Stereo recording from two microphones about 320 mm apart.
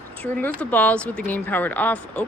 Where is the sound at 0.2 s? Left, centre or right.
Centre.